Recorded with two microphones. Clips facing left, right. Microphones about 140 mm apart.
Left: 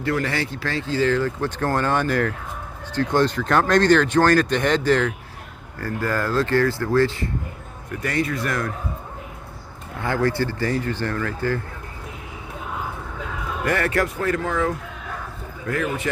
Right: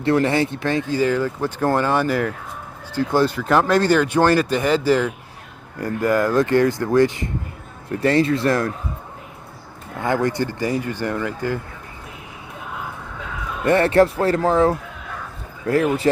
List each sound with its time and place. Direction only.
0.0 s speech: 25° right (ahead or behind)
7.9 s speech: 30° right (ahead or behind)
10.0 s speech: 20° right (ahead or behind)
13.7 s speech: 25° right (ahead or behind)